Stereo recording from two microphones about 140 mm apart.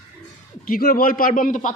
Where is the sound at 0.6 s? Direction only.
90° left; by 1.7 s 65° left (ahead or behind).